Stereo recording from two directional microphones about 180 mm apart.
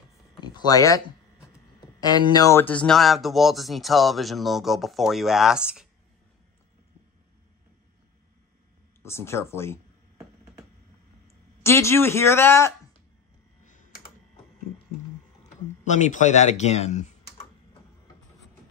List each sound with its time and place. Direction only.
0.4 s a sound: 20° left (ahead or behind)
2.0 s speech: 20° left (ahead or behind)
2.6 s speech: 5° left (ahead or behind)
9.0 s speech: 15° left (ahead or behind)
11.6 s speech: 15° left (ahead or behind)
15.9 s speech: 40° left (ahead or behind)